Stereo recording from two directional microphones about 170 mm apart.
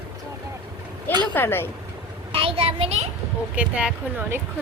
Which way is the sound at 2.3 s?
35° right (ahead or behind).